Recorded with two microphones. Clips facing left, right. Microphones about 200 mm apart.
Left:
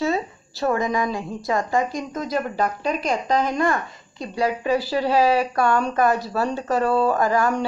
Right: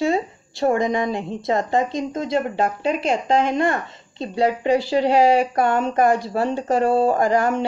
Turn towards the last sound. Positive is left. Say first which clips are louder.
# right 2 dB
turn(degrees=-25)  # may be behind; listen again after turning